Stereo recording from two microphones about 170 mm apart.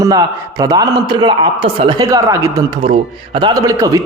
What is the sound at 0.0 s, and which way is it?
A man's voice, 20° right (ahead or behind).